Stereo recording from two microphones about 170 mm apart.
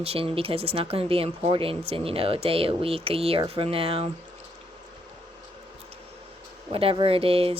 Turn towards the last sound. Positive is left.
turn(degrees=-35)  # may be behind; listen again after turning